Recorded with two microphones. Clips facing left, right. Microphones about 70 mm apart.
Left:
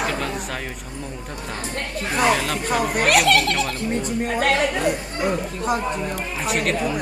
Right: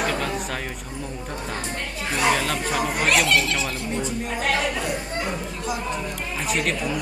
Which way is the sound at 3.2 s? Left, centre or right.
Left.